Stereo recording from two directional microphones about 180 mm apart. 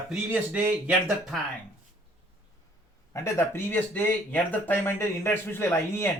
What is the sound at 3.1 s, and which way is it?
Speech, 15° left (ahead or behind).